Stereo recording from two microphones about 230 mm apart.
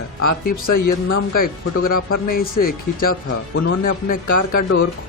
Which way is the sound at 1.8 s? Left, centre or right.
Left.